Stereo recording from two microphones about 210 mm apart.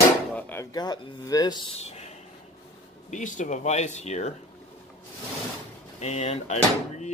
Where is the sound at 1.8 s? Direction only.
30° left (ahead or behind).